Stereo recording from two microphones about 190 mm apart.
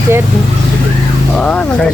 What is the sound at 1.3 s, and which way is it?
Speech, 5° left (ahead or behind).